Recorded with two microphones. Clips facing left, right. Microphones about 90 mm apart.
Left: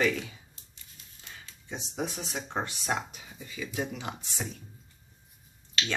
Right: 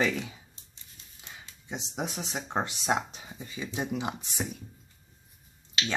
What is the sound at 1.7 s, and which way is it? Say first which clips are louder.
Speech: even; 15° right (ahead or behind).